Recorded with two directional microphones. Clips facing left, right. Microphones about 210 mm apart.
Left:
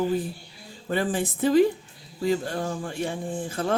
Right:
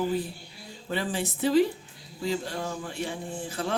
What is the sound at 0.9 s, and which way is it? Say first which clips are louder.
Speech: left 4 dB; 50° left (ahead or behind).